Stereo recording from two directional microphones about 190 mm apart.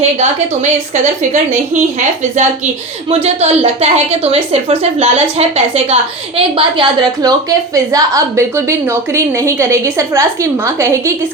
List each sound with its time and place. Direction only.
2.0 s a woman's voice: 40° right (ahead or behind); by 11.1 s 15° right (ahead or behind)